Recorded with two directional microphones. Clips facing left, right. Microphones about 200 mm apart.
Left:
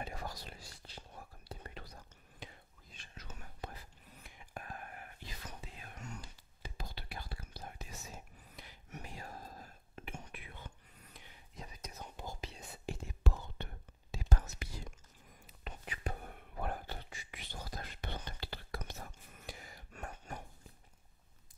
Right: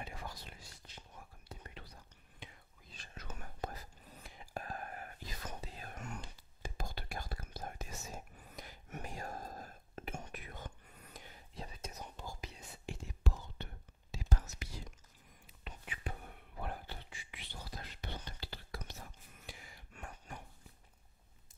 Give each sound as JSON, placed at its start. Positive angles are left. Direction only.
{"t": 0.0, "sound": "whispering", "side_deg": 40}
{"t": 3.2, "sound": "whispering", "side_deg": -55}
{"t": 5.9, "sound": "whispering", "side_deg": -55}
{"t": 11.5, "sound": "whispering", "side_deg": -30}
{"t": 12.2, "sound": "whispering", "side_deg": 25}
{"t": 13.2, "sound": "whispering", "side_deg": 65}
{"t": 15.6, "sound": "whispering", "side_deg": 40}